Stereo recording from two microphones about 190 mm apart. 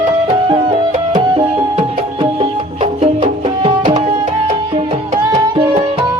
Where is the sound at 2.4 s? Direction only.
30° right (ahead or behind).